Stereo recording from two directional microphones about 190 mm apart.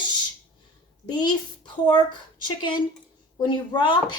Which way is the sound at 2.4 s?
25° left (ahead or behind).